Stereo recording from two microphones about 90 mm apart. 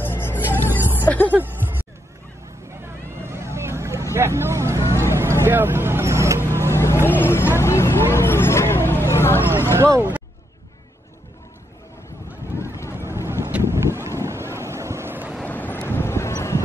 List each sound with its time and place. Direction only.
0.0 s music: 25° left (ahead or behind)
1.3 s speech: 20° right (ahead or behind)
3.3 s vehicle: 30° right (ahead or behind)
6.7 s vehicle: 30° left (ahead or behind)
12.5 s boat: 30° left (ahead or behind)
12.9 s boat: 25° right (ahead or behind)
15.4 s vehicle: 20° left (ahead or behind)